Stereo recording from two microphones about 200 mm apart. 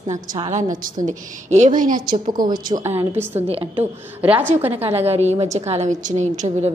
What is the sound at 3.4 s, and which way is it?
Speech, 30° right (ahead or behind).